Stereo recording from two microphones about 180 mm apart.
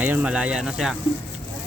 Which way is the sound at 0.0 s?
10° right (ahead or behind).